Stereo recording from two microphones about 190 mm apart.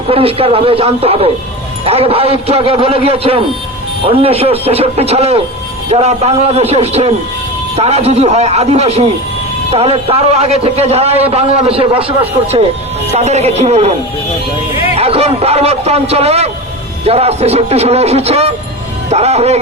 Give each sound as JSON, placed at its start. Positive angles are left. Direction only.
{"t": 0.1, "sound": "a man's voice", "side_deg": -30}
{"t": 14.9, "sound": "a man's voice", "side_deg": -30}